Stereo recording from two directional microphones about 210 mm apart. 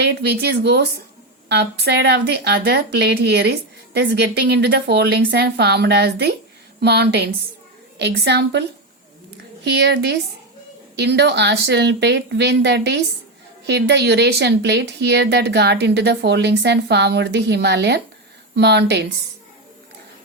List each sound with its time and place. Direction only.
0.0 s a woman's voice: 50° right (ahead or behind)
9.6 s a woman's voice: 55° right (ahead or behind)